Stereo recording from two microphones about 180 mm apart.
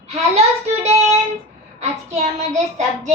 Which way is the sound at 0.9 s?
35° right (ahead or behind).